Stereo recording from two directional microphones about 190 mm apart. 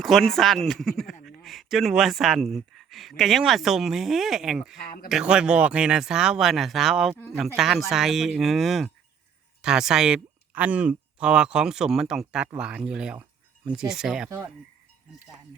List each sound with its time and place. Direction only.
0.0 s speech: centre (ahead or behind)
14.3 s speech: 15° right (ahead or behind)